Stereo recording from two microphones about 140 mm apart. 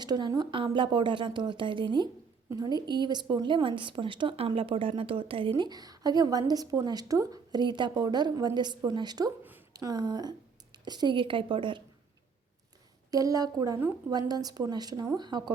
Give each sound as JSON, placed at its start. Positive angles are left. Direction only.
{"t": 0.0, "sound": "a woman's voice", "side_deg": -30}
{"t": 13.1, "sound": "speech", "side_deg": -25}